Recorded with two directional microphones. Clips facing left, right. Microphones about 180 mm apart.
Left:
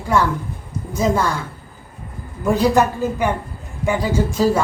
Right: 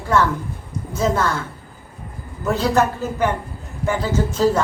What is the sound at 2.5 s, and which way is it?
A man's voice, 15° left (ahead or behind).